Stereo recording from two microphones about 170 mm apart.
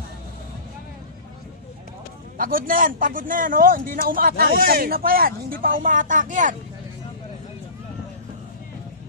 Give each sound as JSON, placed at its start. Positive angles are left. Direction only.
{"t": 2.3, "sound": "speech", "side_deg": -55}